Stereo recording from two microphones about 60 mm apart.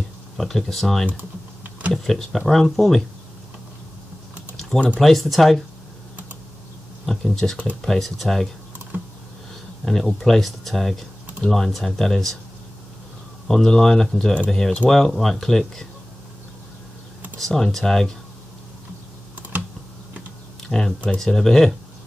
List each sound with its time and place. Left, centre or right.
0.4 s speech: centre
1.0 s typing: right
2.0 s speech: centre
4.7 s speech: centre
5.0 s speech: centre
7.1 s speech: centre
9.8 s speech: centre
13.5 s speech: centre
17.4 s speech: centre
20.6 s a sound: centre
21.2 s speech: centre